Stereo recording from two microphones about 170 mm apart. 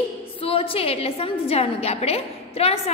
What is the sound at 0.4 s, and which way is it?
A woman's voice, 35° left (ahead or behind).